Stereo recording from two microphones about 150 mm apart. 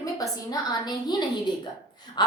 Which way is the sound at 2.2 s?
30° left (ahead or behind).